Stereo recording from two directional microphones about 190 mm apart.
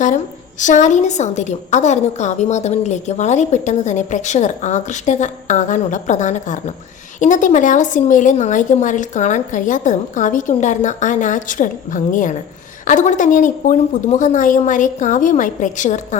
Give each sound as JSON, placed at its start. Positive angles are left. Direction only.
{"t": 0.6, "sound": "a woman's voice", "side_deg": 40}